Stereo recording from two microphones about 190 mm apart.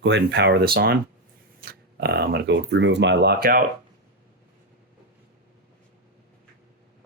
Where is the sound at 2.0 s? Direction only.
55° right (ahead or behind).